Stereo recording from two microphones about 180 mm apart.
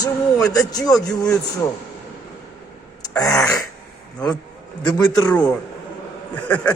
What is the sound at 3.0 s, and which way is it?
Throat clearing, 20° left (ahead or behind).